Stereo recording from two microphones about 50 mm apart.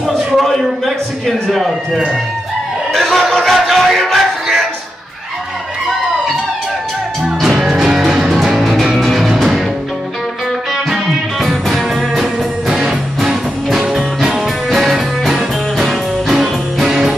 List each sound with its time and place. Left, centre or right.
0.4 s a man's voice: centre
2.9 s music: centre
7.2 s music: centre
10.7 s music: centre
11.3 s music: centre
11.9 s music: centre